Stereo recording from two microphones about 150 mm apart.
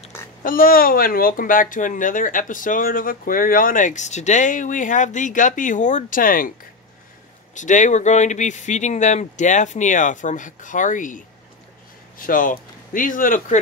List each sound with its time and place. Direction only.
0.4 s speech: 70° left (ahead or behind)
7.5 s speech: 55° left (ahead or behind)